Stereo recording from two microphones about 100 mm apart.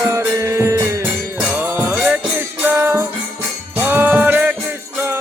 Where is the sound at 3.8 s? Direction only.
20° right (ahead or behind).